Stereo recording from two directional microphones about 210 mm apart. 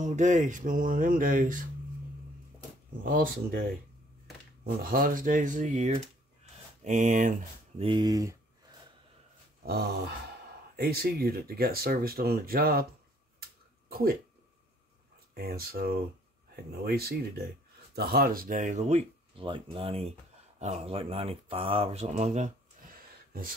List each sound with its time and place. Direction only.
0.0 s speech: 35° right (ahead or behind)
3.1 s speech: 45° right (ahead or behind)
4.8 s speech: 40° right (ahead or behind)
7.8 s speech: 20° right (ahead or behind)
9.7 s speech: 50° right (ahead or behind)
13.4 s a sound: 45° right (ahead or behind)
15.3 s speech: 45° right (ahead or behind)